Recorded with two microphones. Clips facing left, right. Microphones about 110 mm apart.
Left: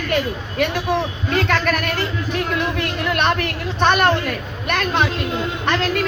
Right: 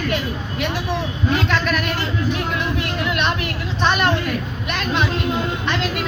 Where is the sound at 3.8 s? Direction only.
50° left (ahead or behind).